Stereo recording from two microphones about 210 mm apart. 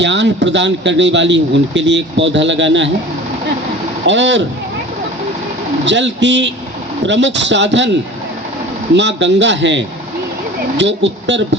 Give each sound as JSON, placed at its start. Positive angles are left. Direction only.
{"t": 0.0, "sound": "a man's voice", "side_deg": -55}
{"t": 4.0, "sound": "a man's voice", "side_deg": -60}
{"t": 5.8, "sound": "a man's voice", "side_deg": -60}
{"t": 9.0, "sound": "a man's voice", "side_deg": -55}